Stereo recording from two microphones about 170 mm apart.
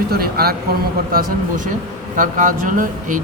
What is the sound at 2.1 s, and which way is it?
Speech, 50° right (ahead or behind).